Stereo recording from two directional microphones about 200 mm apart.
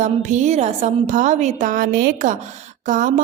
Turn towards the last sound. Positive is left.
turn(degrees=-40)  # may be behind; listen again after turning